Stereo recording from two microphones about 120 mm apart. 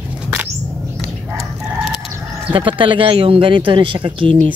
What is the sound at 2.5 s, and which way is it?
Speech, 45° right (ahead or behind).